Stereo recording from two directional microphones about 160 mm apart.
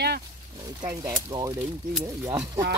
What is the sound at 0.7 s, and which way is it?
Speech, 20° right (ahead or behind).